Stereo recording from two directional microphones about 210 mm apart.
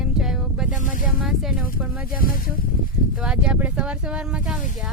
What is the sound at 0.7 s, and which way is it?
Speech, 35° left (ahead or behind).